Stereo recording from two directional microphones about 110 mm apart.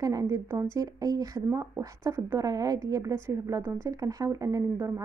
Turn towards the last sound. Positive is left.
turn(degrees=-30)  # may be behind; listen again after turning